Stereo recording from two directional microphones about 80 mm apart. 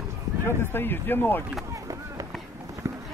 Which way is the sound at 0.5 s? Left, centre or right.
Left.